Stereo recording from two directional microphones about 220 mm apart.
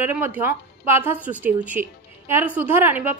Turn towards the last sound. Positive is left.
turn(degrees=-10)  # may be behind; listen again after turning